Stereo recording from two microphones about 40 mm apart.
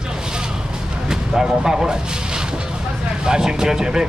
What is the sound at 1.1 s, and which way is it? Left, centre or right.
Speech, centre.